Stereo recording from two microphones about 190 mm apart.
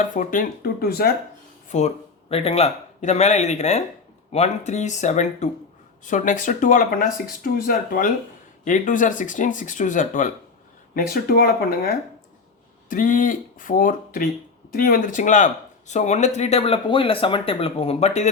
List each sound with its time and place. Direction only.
0.0 s speech: 45° left (ahead or behind)
1.7 s speech: 40° left (ahead or behind)